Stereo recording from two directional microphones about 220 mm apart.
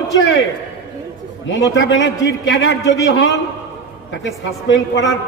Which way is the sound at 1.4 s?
55° left (ahead or behind).